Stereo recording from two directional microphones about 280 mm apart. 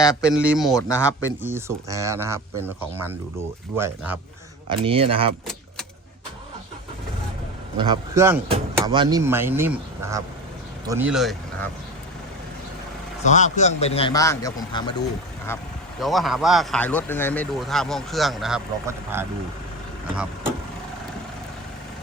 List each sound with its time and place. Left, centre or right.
0.2 s speech: centre
0.8 s speech: centre
1.4 s speech: centre
4.7 s speech: centre
7.8 s speech: centre
13.2 s a man's voice: left; by 19.2 s centre